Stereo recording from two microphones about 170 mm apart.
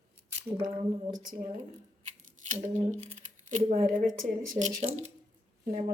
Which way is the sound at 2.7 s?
40° right (ahead or behind).